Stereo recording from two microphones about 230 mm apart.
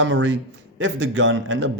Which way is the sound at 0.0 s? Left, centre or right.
Right.